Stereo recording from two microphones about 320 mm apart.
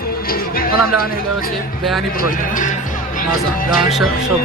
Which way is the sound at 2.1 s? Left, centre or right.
Left.